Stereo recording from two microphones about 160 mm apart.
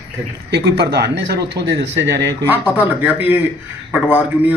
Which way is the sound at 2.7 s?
10° right (ahead or behind).